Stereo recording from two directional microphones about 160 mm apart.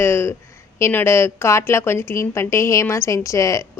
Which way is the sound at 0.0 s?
15° left (ahead or behind).